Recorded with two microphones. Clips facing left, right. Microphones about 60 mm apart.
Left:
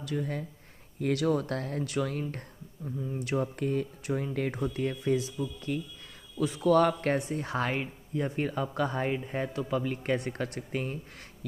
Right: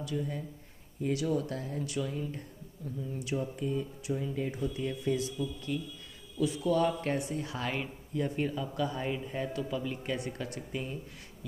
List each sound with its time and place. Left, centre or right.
0.0 s a man's voice: left
1.1 s speech: left
2.8 s a man's voice: left
3.3 s a man's voice: left
6.6 s speech: left
7.2 s a man's voice: left
7.7 s speech: left
8.5 s a man's voice: left